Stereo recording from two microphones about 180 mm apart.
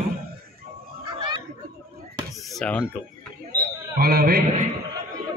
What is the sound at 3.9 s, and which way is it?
Speech, 55° right (ahead or behind).